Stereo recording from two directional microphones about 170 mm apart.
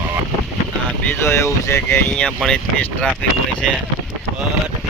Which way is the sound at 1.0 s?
15° left (ahead or behind).